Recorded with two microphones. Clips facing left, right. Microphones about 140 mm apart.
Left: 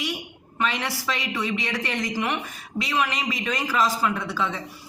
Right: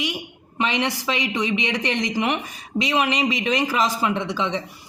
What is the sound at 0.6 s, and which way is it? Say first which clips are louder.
A woman's voice: right 4 dB; 20° right (ahead or behind).